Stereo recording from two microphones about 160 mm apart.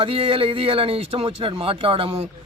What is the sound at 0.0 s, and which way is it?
A man's voice, 35° right (ahead or behind).